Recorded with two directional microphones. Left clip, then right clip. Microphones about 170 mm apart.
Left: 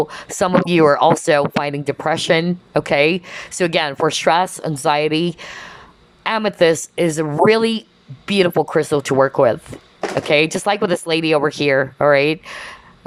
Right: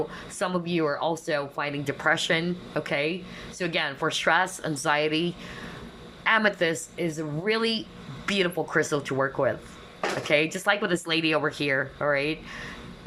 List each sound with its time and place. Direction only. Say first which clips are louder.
0.1 s speech: left 12 dB; 35° left (ahead or behind)